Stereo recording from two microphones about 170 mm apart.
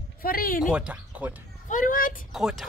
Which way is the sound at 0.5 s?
5° right (ahead or behind).